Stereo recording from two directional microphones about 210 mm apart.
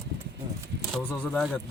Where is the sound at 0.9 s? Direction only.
5° left (ahead or behind).